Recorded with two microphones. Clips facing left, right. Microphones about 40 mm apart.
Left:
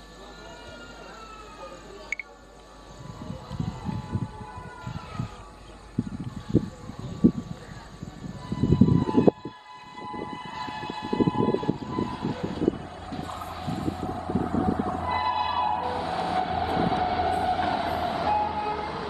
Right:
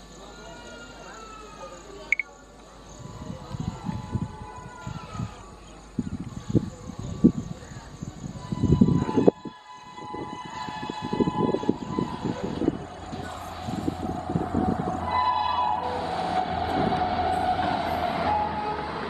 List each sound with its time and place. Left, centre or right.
2.1 s music: right
3.8 s a sound: centre
8.5 s a sound: centre
9.9 s civil defense siren: centre
12.7 s vehicle: centre
17.0 s train: centre